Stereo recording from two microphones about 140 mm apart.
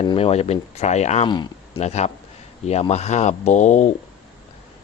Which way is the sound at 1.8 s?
50° left (ahead or behind).